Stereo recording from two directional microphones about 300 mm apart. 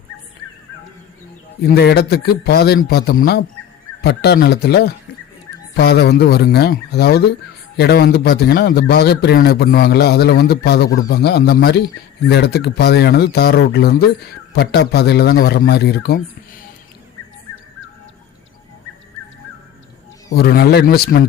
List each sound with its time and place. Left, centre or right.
1.6 s a man's voice: left
20.3 s a man's voice: left